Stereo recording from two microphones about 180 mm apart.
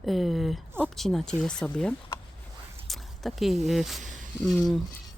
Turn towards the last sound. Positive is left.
turn(degrees=0)  # may be behind; listen again after turning